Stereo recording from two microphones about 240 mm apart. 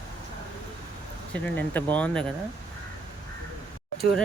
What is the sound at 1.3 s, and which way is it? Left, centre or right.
Speech, centre.